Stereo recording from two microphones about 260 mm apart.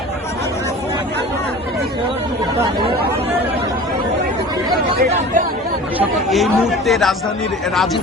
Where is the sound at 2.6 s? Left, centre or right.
Centre.